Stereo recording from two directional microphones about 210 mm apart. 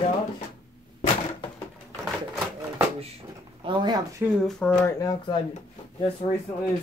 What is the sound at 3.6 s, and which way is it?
Speech, 20° right (ahead or behind).